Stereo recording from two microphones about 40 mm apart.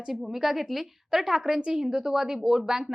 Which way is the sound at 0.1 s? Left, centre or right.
Centre.